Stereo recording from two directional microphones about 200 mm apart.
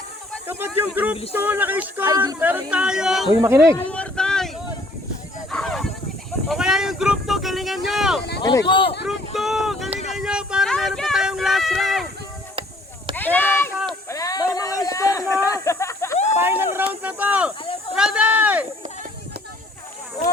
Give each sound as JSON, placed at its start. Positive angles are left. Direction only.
{"t": 0.4, "sound": "speech", "side_deg": -10}
{"t": 2.0, "sound": "speech", "side_deg": -20}
{"t": 2.4, "sound": "speech", "side_deg": -5}
{"t": 3.8, "sound": "vehicle", "side_deg": 5}
{"t": 5.5, "sound": "a sound", "side_deg": 0}
{"t": 6.5, "sound": "speech", "side_deg": 0}
{"t": 8.4, "sound": "speech", "side_deg": 20}
{"t": 9.0, "sound": "speech", "side_deg": 0}
{"t": 13.1, "sound": "a sound", "side_deg": 10}
{"t": 16.4, "sound": "speech", "side_deg": -10}